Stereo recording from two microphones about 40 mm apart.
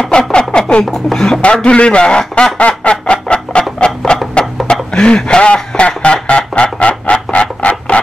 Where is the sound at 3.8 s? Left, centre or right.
Left.